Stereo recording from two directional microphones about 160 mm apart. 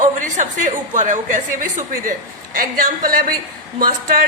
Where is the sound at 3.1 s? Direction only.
60° right (ahead or behind).